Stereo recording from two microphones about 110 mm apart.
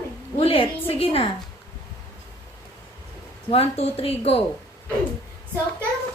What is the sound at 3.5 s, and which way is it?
Speech, 65° left (ahead or behind).